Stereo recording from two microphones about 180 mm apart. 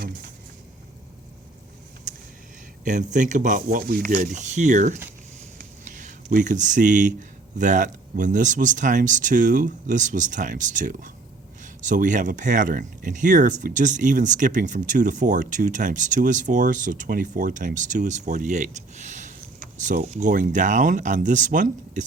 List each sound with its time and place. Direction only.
2.8 s speech: 45° right (ahead or behind)